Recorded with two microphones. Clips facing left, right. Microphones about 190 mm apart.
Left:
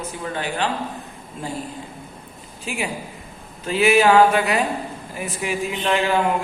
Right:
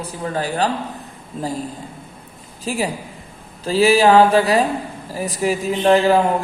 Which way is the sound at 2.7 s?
35° right (ahead or behind).